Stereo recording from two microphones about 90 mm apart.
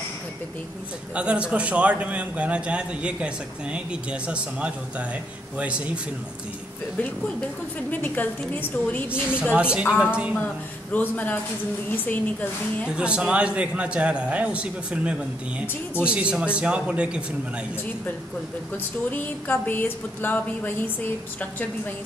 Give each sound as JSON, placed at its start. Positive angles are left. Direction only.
{"t": 1.1, "sound": "a man's voice", "side_deg": -15}
{"t": 7.0, "sound": "a woman's voice", "side_deg": 10}
{"t": 9.5, "sound": "a man's voice", "side_deg": -10}
{"t": 10.9, "sound": "a woman's voice", "side_deg": 20}
{"t": 12.9, "sound": "a man's voice", "side_deg": -10}
{"t": 19.0, "sound": "a woman's voice", "side_deg": 20}